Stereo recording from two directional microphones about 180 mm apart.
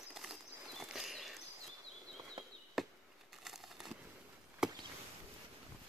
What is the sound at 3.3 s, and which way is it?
Crumpling, centre (ahead or behind).